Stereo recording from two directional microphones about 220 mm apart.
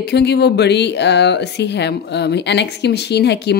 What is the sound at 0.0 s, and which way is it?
A woman's voice, 50° left (ahead or behind).